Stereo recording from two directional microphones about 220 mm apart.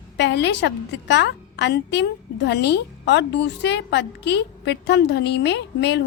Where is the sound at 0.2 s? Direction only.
50° left (ahead or behind).